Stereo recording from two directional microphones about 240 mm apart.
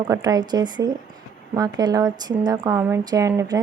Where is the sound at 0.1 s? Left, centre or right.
Centre.